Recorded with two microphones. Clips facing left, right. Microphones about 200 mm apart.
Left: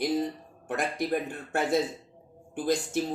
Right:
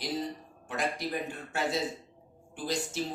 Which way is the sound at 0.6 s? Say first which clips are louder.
Left 4 dB; 55° left (ahead or behind).